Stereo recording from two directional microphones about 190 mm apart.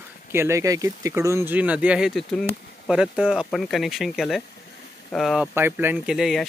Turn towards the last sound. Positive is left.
turn(degrees=0)  # may be behind; listen again after turning